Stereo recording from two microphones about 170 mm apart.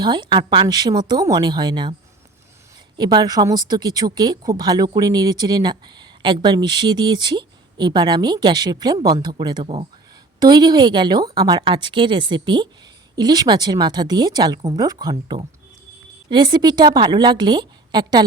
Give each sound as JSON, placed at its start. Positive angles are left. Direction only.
{"t": 0.0, "sound": "speech", "side_deg": -25}
{"t": 3.0, "sound": "speech", "side_deg": -25}
{"t": 16.3, "sound": "speech", "side_deg": -25}